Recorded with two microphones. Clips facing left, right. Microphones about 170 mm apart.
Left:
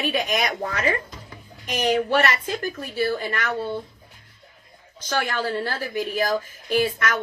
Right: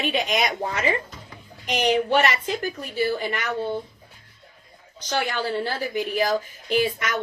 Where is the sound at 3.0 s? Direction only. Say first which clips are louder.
Even; 15° right (ahead or behind).